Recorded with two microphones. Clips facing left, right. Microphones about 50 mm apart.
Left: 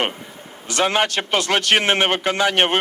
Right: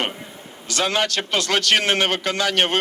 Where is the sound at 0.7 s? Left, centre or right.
Left.